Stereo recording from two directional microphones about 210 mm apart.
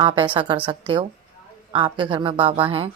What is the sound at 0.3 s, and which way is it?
Speech, 25° right (ahead or behind).